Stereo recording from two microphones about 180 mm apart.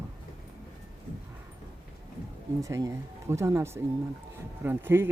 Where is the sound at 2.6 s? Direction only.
15° right (ahead or behind).